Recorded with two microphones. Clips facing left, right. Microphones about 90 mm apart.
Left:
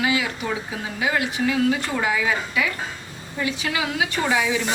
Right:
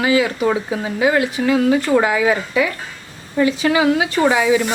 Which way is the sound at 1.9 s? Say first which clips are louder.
Right 9 dB; 60° right (ahead or behind).